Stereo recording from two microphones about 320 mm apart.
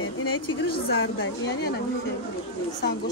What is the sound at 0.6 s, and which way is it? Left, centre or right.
A woman's voice, left.